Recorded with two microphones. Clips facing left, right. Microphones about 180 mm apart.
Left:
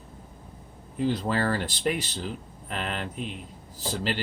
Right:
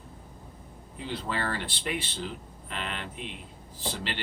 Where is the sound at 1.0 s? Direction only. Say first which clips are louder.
Left 7 dB; 40° left (ahead or behind).